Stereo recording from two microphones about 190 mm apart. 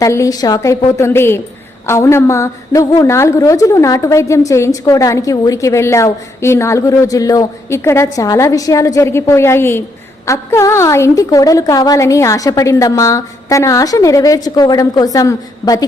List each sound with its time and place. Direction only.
0.0 s a woman's voice: 15° left (ahead or behind)